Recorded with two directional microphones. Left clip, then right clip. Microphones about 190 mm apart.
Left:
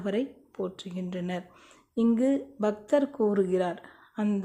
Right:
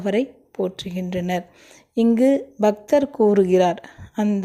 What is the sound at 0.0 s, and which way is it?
Speech, 20° right (ahead or behind).